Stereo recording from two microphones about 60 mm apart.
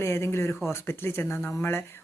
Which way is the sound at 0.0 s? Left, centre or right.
Left.